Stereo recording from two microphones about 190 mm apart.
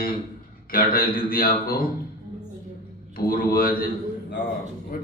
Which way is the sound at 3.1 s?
50° left (ahead or behind).